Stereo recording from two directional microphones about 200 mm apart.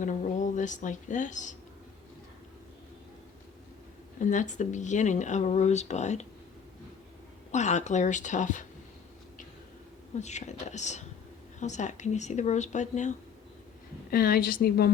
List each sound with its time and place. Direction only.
0.0 s speech: 40° left (ahead or behind)
4.2 s speech: 40° left (ahead or behind)
7.5 s speech: 35° left (ahead or behind)
10.2 s speech: 35° left (ahead or behind)
14.1 s a woman's voice: 45° left (ahead or behind)